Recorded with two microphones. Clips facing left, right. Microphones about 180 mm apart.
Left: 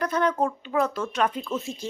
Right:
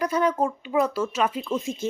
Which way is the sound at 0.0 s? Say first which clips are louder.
Right 1 dB; 10° right (ahead or behind).